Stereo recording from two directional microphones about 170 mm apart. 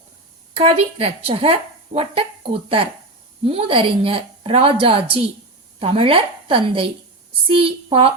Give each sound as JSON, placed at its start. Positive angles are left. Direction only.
{"t": 0.5, "sound": "speech", "side_deg": -35}